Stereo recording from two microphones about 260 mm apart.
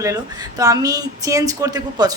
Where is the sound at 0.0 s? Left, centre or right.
Centre.